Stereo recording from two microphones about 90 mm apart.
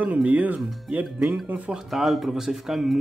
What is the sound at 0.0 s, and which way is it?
Speech, 15° right (ahead or behind).